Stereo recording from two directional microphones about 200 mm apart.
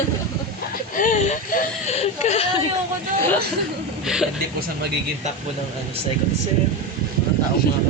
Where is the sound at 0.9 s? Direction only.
40° left (ahead or behind).